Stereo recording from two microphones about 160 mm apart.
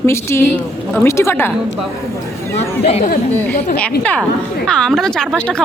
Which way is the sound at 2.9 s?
40° left (ahead or behind).